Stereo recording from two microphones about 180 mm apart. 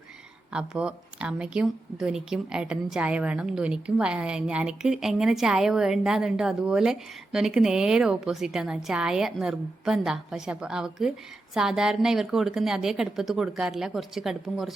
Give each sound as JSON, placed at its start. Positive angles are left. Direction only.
{"t": 0.5, "sound": "speech", "side_deg": -5}